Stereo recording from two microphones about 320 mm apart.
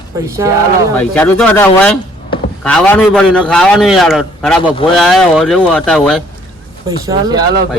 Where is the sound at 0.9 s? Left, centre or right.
Centre.